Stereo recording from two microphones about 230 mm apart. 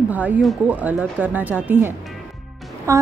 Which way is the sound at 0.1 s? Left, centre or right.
Centre.